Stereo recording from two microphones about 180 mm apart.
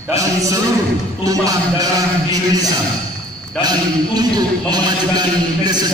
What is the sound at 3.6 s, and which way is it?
A man's voice, 20° right (ahead or behind).